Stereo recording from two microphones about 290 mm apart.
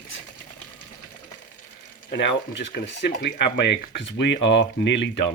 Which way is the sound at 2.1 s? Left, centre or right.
Left.